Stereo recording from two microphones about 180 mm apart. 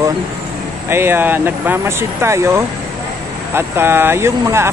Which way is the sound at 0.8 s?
15° right (ahead or behind).